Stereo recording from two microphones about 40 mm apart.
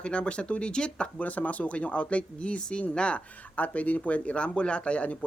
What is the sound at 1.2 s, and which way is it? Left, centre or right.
Speech, left.